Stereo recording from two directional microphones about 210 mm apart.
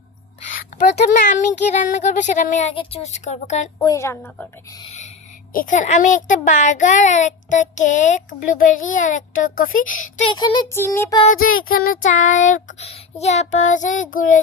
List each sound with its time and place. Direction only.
0.8 s a child's voice: 35° left (ahead or behind)
3.8 s a woman's voice: 15° left (ahead or behind)
5.5 s a child's voice: 35° left (ahead or behind)
10.2 s child singing: 20° left (ahead or behind)
11.9 s a child's voice: 35° left (ahead or behind)